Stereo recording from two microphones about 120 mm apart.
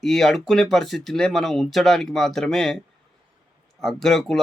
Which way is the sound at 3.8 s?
5° left (ahead or behind).